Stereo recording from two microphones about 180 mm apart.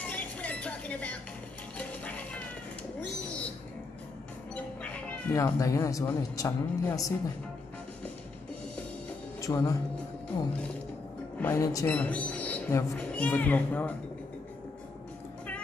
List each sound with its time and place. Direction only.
0.0 s music: 5° left (ahead or behind)
5.3 s speech: 15° left (ahead or behind)
9.4 s speech: 15° left (ahead or behind)
11.3 s a woman's voice: 15° left (ahead or behind)